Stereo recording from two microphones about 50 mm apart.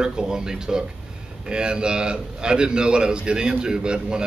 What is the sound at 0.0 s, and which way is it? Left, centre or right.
A man's voice, centre.